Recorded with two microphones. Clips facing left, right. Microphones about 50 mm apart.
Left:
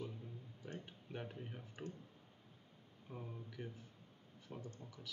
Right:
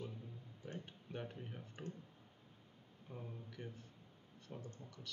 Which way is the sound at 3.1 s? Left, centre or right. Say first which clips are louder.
Left 1 dB; centre.